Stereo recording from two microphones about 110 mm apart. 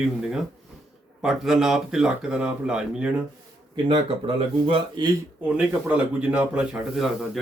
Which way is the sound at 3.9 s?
55° right (ahead or behind).